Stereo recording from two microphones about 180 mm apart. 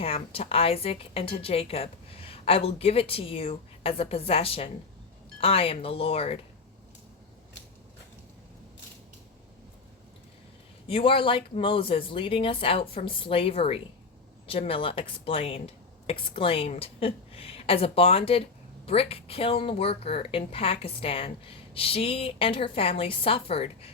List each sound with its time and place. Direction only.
0.0 s a woman's voice: 30° left (ahead or behind)
10.8 s a woman's voice: 30° left (ahead or behind)